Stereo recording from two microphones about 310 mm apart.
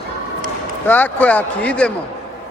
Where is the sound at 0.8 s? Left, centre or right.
Centre.